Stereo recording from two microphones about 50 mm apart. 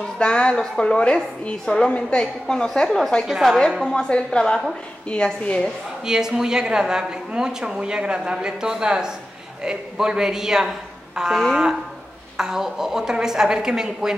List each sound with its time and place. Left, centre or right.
0.2 s a woman's voice: centre
3.3 s a woman's voice: centre
3.8 s a woman's voice: centre
6.0 s a woman's voice: centre